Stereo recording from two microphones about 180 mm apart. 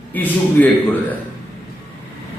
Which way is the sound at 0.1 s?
10° left (ahead or behind).